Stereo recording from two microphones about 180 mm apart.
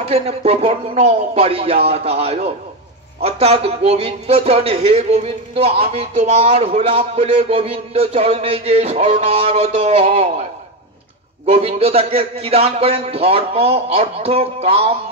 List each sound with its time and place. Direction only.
0.0 s a man's voice: 35° right (ahead or behind)
11.4 s a man's voice: 35° right (ahead or behind)